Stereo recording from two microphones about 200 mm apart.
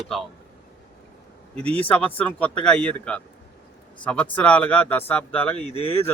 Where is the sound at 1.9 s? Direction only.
5° left (ahead or behind).